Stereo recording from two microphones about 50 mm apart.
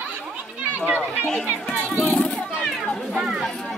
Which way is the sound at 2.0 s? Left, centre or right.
Left.